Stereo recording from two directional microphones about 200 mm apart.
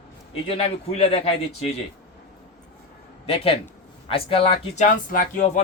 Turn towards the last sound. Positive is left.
turn(degrees=45)  # may be behind; listen again after turning